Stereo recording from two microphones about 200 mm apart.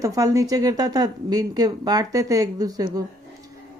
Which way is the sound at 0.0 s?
15° right (ahead or behind).